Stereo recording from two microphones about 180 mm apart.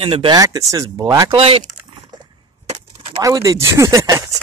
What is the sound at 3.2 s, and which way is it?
Speech, 20° right (ahead or behind).